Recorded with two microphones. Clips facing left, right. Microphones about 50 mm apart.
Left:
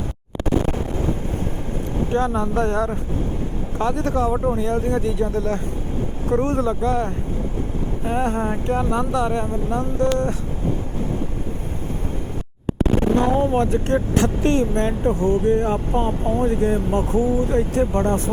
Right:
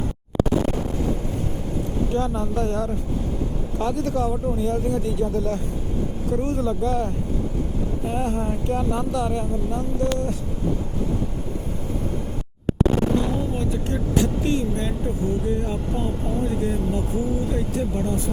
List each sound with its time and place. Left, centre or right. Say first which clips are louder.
2.0 s speech: left 6 dB; left
13.1 s speech: left 6 dB; left